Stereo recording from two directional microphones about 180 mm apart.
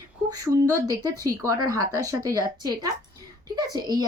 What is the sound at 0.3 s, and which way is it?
Speech, 20° right (ahead or behind).